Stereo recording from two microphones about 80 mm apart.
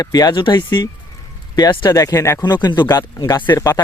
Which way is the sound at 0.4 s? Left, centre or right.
Left.